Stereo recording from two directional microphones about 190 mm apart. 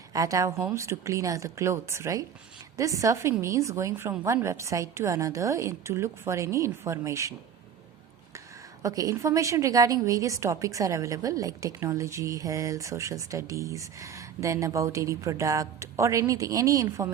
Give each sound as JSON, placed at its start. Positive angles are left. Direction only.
{"t": 0.1, "sound": "a woman's voice", "side_deg": -15}
{"t": 8.8, "sound": "a woman's voice", "side_deg": -20}